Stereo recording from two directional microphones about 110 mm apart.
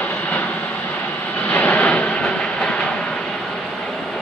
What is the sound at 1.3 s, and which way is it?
Train, 15° left (ahead or behind).